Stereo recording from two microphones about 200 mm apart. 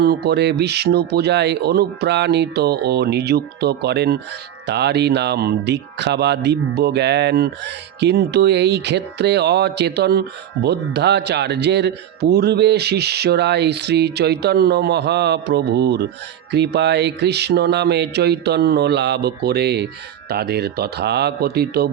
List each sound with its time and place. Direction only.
0.0 s speech: 55° right (ahead or behind)